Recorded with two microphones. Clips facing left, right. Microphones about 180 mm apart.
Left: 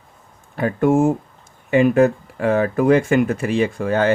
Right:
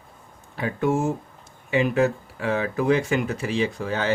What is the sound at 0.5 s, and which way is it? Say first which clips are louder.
Speech: left 7 dB; 50° left (ahead or behind).